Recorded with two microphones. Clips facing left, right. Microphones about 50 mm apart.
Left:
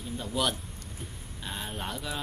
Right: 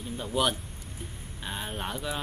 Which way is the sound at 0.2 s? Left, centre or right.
Centre.